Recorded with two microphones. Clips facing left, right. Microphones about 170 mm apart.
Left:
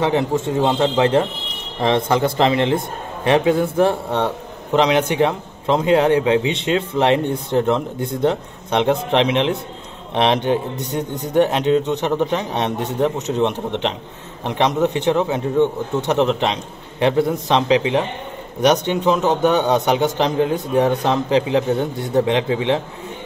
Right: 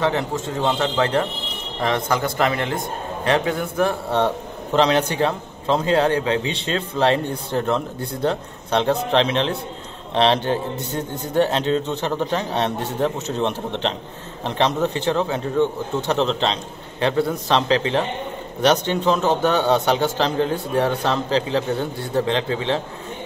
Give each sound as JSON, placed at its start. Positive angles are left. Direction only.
{"t": 0.0, "sound": "a man's voice", "side_deg": 20}
{"t": 4.7, "sound": "a man's voice", "side_deg": 15}